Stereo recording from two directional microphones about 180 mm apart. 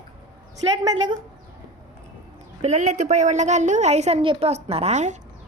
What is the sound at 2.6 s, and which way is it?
A woman's voice, 40° right (ahead or behind).